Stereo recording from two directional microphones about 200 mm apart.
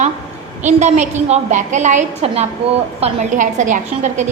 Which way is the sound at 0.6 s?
35° right (ahead or behind).